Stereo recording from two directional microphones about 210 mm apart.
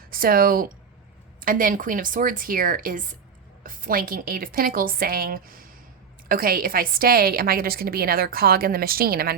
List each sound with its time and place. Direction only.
0.1 s a woman's voice: 45° right (ahead or behind)